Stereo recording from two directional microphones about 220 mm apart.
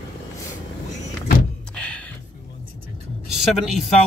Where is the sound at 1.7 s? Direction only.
5° left (ahead or behind).